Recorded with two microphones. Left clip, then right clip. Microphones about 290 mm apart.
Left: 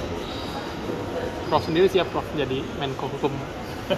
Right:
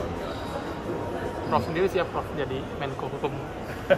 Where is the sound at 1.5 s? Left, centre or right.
Left.